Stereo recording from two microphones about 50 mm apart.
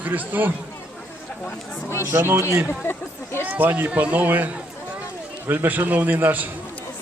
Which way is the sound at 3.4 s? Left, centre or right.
Right.